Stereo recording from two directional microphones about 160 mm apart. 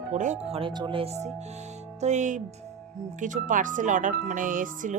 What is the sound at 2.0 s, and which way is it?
Speech, 50° right (ahead or behind).